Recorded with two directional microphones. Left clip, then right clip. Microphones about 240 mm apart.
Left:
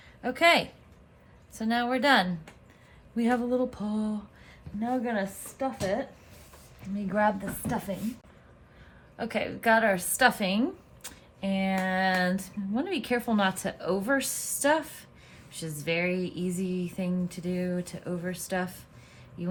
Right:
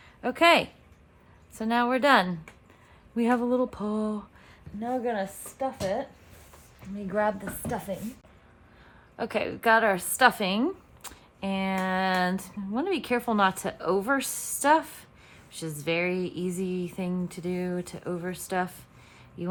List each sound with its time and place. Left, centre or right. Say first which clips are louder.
0.2 s a woman's voice: right 2 dB; right
7.1 s speech: left 1 dB; centre
9.1 s a woman's voice: right 2 dB; right